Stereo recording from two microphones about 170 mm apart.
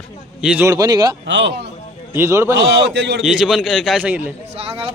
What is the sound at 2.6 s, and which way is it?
Speech, 90° right.